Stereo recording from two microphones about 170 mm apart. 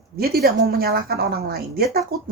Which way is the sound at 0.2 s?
65° right (ahead or behind).